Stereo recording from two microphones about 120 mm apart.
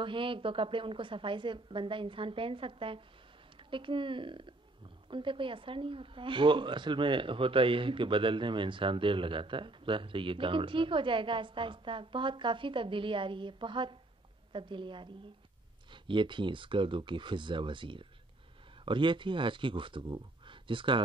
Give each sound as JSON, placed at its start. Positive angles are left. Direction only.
{"t": 0.0, "sound": "speech", "side_deg": -45}